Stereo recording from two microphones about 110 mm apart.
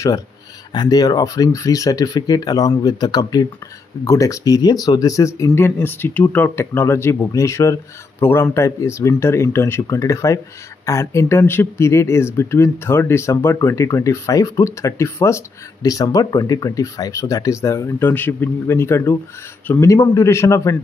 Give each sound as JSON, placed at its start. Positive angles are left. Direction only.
{"t": 0.7, "sound": "speech", "side_deg": 35}